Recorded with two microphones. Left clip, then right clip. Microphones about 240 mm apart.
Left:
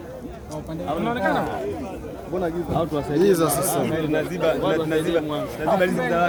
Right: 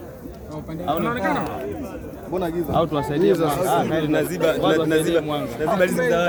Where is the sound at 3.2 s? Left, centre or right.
Left.